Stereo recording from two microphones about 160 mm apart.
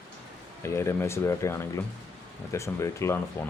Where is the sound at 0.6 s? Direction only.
15° left (ahead or behind).